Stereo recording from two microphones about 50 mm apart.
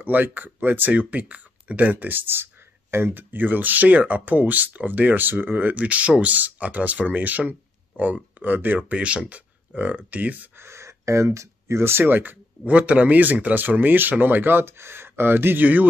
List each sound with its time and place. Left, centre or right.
0.0 s speech: right
3.2 s speech: right
10.6 s speech: right
12.7 s speech: right
15.6 s speech: right